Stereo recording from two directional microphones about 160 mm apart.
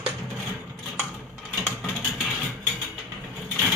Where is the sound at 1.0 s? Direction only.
10° right (ahead or behind).